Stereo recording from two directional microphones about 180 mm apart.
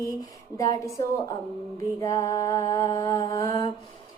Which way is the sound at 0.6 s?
20° left (ahead or behind).